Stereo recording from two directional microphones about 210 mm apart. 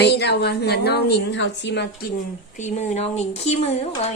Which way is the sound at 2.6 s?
35° left (ahead or behind).